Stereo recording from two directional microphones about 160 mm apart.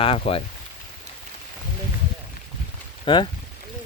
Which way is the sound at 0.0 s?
35° left (ahead or behind).